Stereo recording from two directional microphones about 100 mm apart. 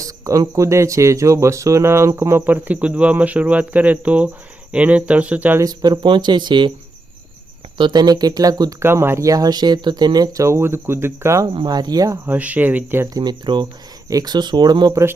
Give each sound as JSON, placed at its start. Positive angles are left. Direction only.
{"t": 0.0, "sound": "speech", "side_deg": -35}
{"t": 5.5, "sound": "speech", "side_deg": -40}
{"t": 7.8, "sound": "speech", "side_deg": -45}
{"t": 8.8, "sound": "speech", "side_deg": -25}
{"t": 11.6, "sound": "speech", "side_deg": -40}
{"t": 12.2, "sound": "speech", "side_deg": -15}
{"t": 13.1, "sound": "speech", "side_deg": -45}